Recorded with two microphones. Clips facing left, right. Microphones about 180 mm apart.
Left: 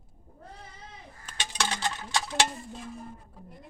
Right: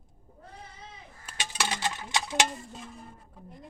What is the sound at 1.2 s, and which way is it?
Coin, 10° right (ahead or behind).